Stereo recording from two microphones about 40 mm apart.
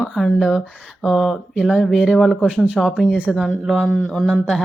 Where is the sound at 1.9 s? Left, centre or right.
Centre.